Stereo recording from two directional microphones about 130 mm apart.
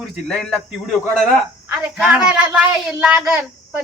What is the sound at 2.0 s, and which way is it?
Speech, 5° right (ahead or behind).